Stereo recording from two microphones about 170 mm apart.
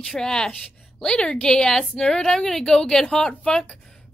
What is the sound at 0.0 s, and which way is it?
A woman's voice, 5° left (ahead or behind).